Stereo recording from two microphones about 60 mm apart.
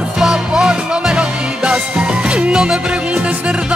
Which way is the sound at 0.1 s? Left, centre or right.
Centre.